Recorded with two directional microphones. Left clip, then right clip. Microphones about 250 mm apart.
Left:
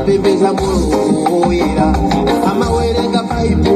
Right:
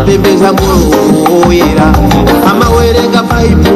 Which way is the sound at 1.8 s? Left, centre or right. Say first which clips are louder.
Right 6 dB; right.